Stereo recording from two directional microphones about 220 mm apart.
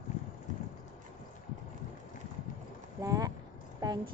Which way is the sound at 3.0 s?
15° right (ahead or behind).